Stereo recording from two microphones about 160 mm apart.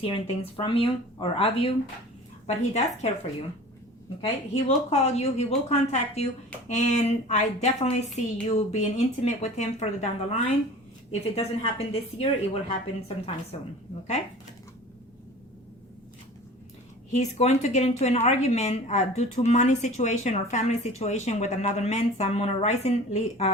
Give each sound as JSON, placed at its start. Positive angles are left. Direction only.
{"t": 0.0, "sound": "speech", "side_deg": 35}
{"t": 4.2, "sound": "speech", "side_deg": 40}
{"t": 17.1, "sound": "speech", "side_deg": 45}